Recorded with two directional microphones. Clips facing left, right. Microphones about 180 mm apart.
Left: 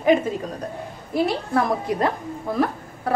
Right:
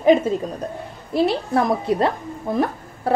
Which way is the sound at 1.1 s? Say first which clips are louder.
Right 2 dB; 25° right (ahead or behind).